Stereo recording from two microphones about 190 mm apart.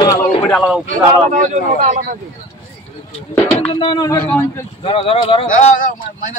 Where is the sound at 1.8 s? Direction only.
45° right (ahead or behind).